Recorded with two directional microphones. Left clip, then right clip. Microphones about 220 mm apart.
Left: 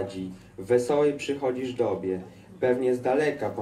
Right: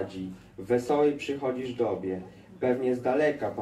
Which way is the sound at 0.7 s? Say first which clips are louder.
Left 2 dB; 50° left (ahead or behind).